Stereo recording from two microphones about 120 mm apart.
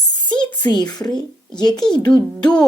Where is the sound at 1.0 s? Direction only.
5° left (ahead or behind).